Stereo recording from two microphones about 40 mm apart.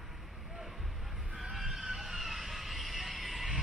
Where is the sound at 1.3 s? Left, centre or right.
Centre.